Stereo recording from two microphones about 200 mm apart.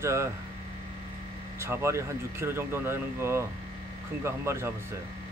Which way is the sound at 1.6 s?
15° right (ahead or behind).